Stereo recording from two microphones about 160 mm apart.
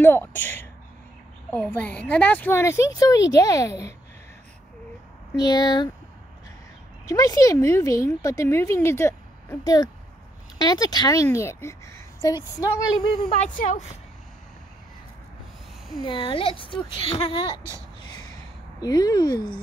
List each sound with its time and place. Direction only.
0.0 s a woman's voice: 15° left (ahead or behind)
5.3 s speech: 25° left (ahead or behind)
7.1 s speech: 20° left (ahead or behind)
13.4 s speech: 50° left (ahead or behind)
16.1 s speech: 35° left (ahead or behind)
18.8 s speech: 25° left (ahead or behind)